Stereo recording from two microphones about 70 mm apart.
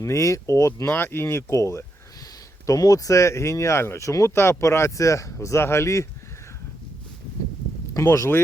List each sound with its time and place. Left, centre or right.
0.0 s speech: left
0.9 s speech: left
2.6 s speech: left
8.0 s speech: left